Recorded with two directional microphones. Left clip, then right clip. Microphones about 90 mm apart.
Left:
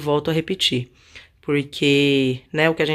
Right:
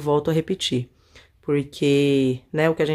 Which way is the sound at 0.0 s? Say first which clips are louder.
Even; 35° right (ahead or behind).